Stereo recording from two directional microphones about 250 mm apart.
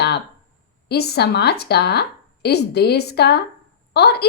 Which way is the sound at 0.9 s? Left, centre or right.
Left.